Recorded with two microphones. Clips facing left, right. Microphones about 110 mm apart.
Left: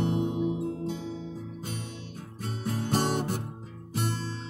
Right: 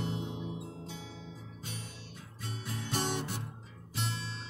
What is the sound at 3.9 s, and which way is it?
Music, 35° left (ahead or behind).